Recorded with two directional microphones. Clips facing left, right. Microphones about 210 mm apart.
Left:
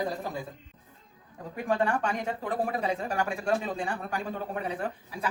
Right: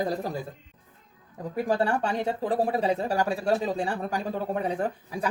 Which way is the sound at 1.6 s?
35° right (ahead or behind).